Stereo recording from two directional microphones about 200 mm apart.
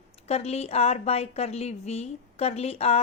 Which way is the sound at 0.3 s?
30° left (ahead or behind).